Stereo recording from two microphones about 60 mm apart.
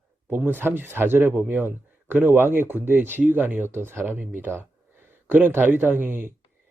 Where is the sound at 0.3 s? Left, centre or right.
Right.